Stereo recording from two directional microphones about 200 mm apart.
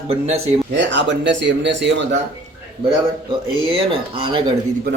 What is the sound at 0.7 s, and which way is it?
Speech, 60° right (ahead or behind).